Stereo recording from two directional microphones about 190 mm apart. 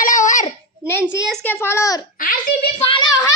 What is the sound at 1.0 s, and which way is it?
A child's voice, 5° left (ahead or behind).